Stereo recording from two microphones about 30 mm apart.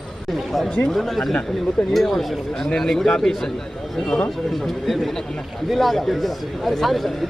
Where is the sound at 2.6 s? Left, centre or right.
Centre.